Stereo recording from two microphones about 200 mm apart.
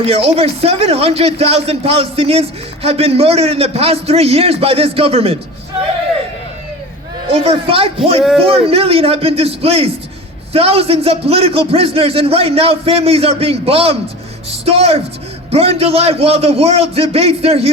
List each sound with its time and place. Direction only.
0.0 s a man's voice: 30° right (ahead or behind)
7.3 s a man's voice: 30° right (ahead or behind)
8.2 s speech: centre (ahead or behind)
8.6 s a man's voice: 30° right (ahead or behind)